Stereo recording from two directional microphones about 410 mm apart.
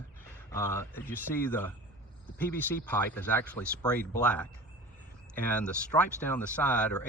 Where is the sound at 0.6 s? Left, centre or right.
Centre.